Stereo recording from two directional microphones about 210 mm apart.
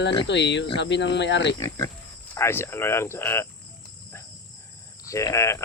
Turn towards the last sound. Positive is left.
turn(degrees=15)  # may be behind; listen again after turning